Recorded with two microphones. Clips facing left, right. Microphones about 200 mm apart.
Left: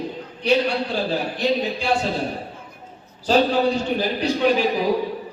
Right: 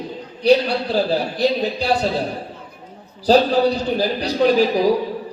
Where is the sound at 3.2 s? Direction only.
35° right (ahead or behind).